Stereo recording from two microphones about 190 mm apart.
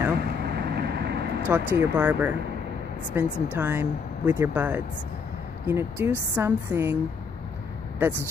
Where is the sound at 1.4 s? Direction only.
10° right (ahead or behind).